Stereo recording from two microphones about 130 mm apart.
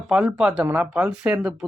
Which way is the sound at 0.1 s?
5° right (ahead or behind).